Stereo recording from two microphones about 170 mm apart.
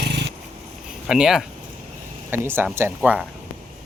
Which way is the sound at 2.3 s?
15° right (ahead or behind).